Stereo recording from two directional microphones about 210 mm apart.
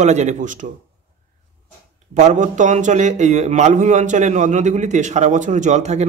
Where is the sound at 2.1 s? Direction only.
35° right (ahead or behind).